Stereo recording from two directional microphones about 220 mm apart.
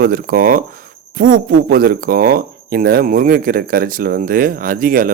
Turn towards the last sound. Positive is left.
turn(degrees=-40)  # may be behind; listen again after turning